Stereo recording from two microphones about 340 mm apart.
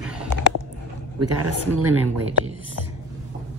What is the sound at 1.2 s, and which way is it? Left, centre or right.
Speech, right.